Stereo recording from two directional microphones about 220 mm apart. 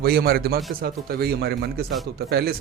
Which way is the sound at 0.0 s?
45° right (ahead or behind).